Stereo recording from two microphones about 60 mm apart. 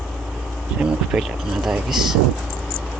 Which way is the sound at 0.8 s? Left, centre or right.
Centre.